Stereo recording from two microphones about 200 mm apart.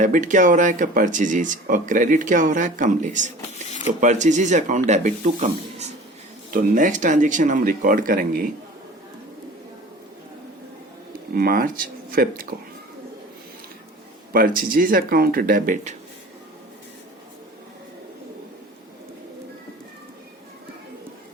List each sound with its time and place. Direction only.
0.0 s speech: 40° right (ahead or behind)
11.3 s speech: 45° right (ahead or behind)
14.3 s speech: 45° right (ahead or behind)